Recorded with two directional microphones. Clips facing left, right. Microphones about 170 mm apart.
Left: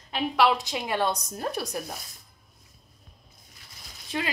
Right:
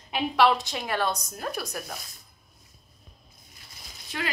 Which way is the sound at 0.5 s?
15° left (ahead or behind).